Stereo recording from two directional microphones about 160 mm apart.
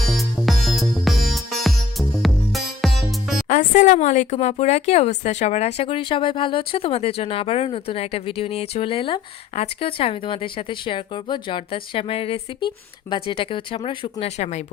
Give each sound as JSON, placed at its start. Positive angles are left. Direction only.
{"t": 0.0, "sound": "music", "side_deg": 0}
{"t": 3.5, "sound": "speech", "side_deg": 55}